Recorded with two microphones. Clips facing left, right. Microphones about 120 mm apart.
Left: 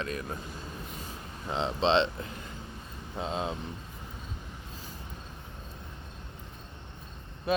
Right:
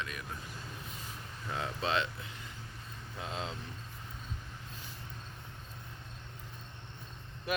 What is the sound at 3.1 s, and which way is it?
Speech, 25° left (ahead or behind).